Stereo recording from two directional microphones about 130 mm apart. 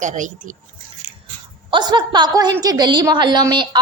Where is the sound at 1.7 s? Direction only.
35° right (ahead or behind).